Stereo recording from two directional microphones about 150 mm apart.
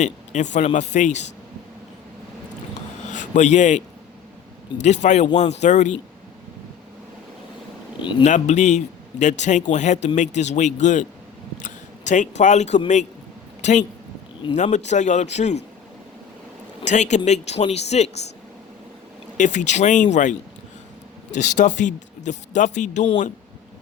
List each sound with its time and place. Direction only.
0.0 s a man's voice: 50° left (ahead or behind)
3.1 s a man's voice: 55° left (ahead or behind)
8.2 s a man's voice: 50° left (ahead or behind)
16.8 s a man's voice: 50° left (ahead or behind)
19.4 s a man's voice: 55° left (ahead or behind)
21.3 s speech: 55° left (ahead or behind)